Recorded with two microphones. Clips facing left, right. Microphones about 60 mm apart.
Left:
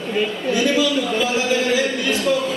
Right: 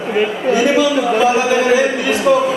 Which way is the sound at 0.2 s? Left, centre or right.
Right.